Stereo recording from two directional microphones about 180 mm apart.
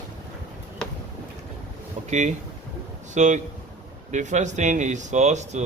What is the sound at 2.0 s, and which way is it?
Speech, 40° right (ahead or behind).